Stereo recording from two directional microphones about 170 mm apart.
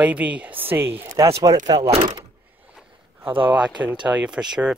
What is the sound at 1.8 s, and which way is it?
Speech, 40° right (ahead or behind).